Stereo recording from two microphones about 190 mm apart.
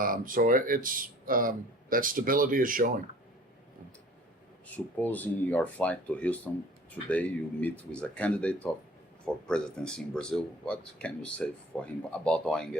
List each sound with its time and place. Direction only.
0.0 s speech: 45° right (ahead or behind)
4.9 s speech: 10° left (ahead or behind)